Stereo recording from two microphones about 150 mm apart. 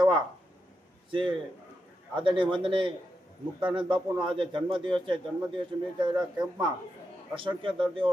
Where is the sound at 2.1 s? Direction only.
35° right (ahead or behind).